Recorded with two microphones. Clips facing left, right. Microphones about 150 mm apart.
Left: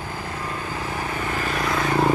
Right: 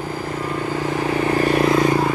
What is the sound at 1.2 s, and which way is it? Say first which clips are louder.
Vehicle: right 10 dB; 35° right (ahead or behind).